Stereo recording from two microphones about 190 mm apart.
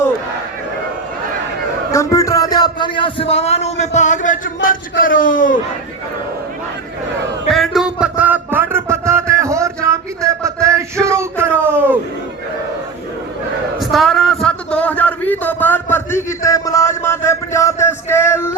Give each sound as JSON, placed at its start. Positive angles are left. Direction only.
{"t": 1.9, "sound": "a man's voice", "side_deg": 15}
{"t": 7.5, "sound": "music", "side_deg": 0}
{"t": 13.9, "sound": "a sound", "side_deg": 0}